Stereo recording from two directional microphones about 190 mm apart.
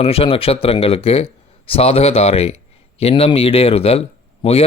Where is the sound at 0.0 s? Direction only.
30° left (ahead or behind).